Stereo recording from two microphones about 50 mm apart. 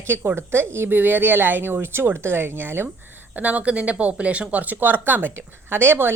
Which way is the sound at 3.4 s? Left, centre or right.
Right.